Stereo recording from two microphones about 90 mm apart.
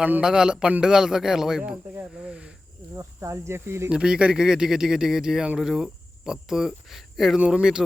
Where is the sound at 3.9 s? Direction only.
10° right (ahead or behind).